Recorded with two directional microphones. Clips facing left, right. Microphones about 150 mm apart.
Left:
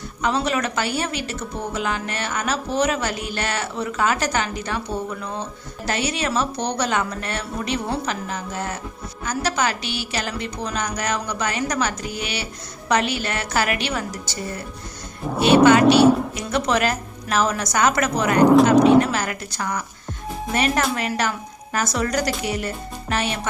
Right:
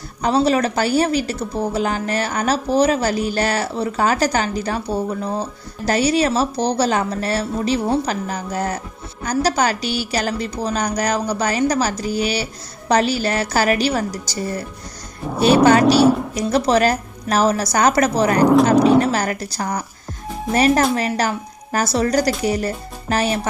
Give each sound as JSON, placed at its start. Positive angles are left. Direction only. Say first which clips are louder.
{"t": 0.2, "sound": "speech", "louder": "right 6 dB", "side_deg": -35}
{"t": 16.0, "sound": "speech", "louder": "even", "side_deg": 0}
{"t": 16.3, "sound": "speech", "louder": "right 5 dB", "side_deg": -35}
{"t": 18.7, "sound": "speech", "louder": "even", "side_deg": 0}
{"t": 18.9, "sound": "speech", "louder": "right 1 dB", "side_deg": -35}